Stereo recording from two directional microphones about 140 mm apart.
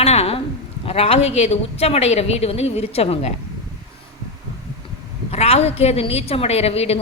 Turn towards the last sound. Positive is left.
turn(degrees=45)  # may be behind; listen again after turning